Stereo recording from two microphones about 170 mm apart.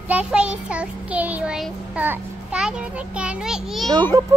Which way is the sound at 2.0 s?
10° right (ahead or behind).